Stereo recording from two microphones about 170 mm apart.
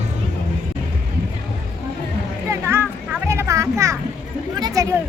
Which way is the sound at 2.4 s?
15° right (ahead or behind).